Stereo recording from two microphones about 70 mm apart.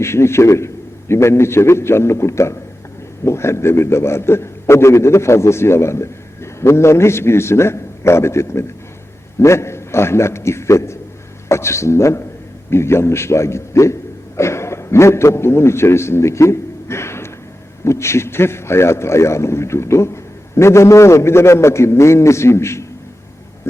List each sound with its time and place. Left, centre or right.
0.0 s a man's voice: left